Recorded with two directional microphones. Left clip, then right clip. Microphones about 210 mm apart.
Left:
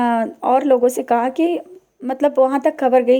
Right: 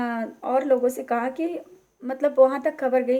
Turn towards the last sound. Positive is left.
turn(degrees=35)  # may be behind; listen again after turning